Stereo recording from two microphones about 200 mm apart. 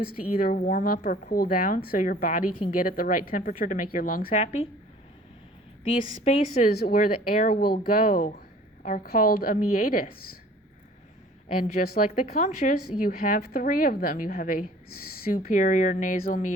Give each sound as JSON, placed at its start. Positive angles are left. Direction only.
{"t": 0.3, "sound": "a woman's voice", "side_deg": 45}
{"t": 5.8, "sound": "speech", "side_deg": 30}
{"t": 6.7, "sound": "a woman's voice", "side_deg": 45}
{"t": 11.7, "sound": "a woman's voice", "side_deg": 45}